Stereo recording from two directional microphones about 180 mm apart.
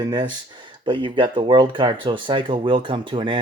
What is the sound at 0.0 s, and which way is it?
Speech, 25° right (ahead or behind).